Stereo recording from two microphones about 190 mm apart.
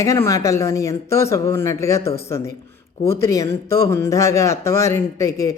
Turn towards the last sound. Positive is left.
turn(degrees=15)  # may be behind; listen again after turning